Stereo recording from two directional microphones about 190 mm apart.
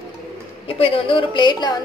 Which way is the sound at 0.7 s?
30° left (ahead or behind).